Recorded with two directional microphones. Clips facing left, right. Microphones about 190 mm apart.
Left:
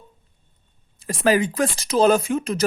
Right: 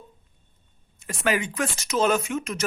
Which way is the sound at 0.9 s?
35° left (ahead or behind).